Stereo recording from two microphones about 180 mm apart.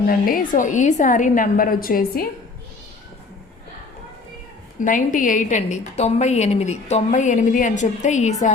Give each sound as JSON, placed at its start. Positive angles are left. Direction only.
{"t": 0.1, "sound": "a woman's voice", "side_deg": 50}
{"t": 4.8, "sound": "a woman's voice", "side_deg": 45}